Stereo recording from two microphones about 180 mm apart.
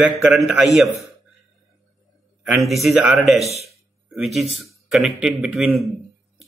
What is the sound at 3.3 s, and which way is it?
Speech, 35° right (ahead or behind).